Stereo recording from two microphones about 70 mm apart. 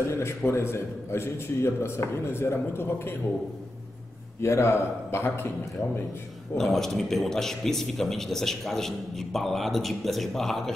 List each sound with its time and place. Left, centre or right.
0.0 s speech: left
4.4 s speech: left
6.5 s a man's voice: centre